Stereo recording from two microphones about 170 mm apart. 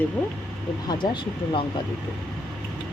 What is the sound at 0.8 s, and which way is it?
Speech, 25° left (ahead or behind).